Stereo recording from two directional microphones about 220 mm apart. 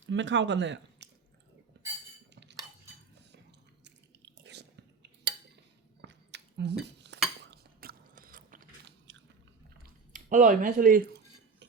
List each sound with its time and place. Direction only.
0.1 s speech: 55° right (ahead or behind)
1.7 s chink: 50° right (ahead or behind)
2.3 s cutlery: 55° right (ahead or behind)
3.8 s chewing: 50° right (ahead or behind)
6.0 s dishes: 55° right (ahead or behind)
7.5 s biting: 45° right (ahead or behind)
9.1 s biting: 55° right (ahead or behind)
9.8 s a sound: 35° right (ahead or behind)